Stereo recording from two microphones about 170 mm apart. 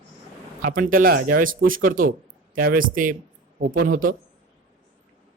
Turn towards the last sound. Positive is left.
turn(degrees=-55)  # may be behind; listen again after turning